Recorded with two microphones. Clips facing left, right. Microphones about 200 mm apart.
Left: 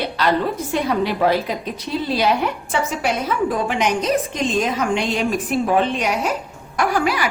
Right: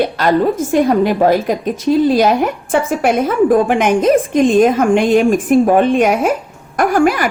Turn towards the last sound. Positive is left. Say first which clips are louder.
# right 7 dB
turn(degrees=-50)  # may be behind; listen again after turning